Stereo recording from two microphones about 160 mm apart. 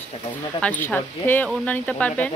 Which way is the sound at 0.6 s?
10° left (ahead or behind).